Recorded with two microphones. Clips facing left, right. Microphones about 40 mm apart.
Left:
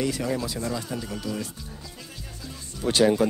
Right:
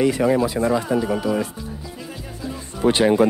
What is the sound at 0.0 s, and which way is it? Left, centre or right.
Speech, right.